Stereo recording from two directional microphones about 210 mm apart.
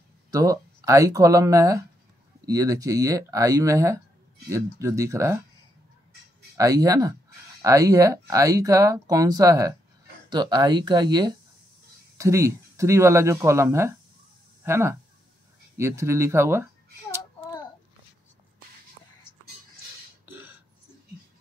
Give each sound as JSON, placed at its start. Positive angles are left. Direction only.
{"t": 0.3, "sound": "speech", "side_deg": -15}
{"t": 6.5, "sound": "speech", "side_deg": -15}
{"t": 20.2, "sound": "burping", "side_deg": -10}